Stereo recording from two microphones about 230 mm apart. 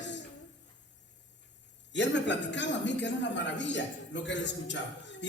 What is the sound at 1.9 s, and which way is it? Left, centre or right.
A man's voice, left.